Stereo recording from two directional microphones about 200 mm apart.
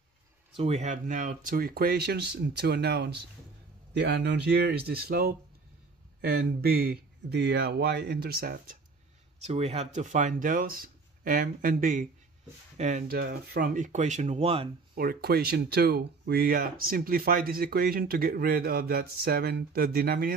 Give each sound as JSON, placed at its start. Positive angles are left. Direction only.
{"t": 0.6, "sound": "speech", "side_deg": -35}
{"t": 9.5, "sound": "speech", "side_deg": -30}
{"t": 15.0, "sound": "speech", "side_deg": -50}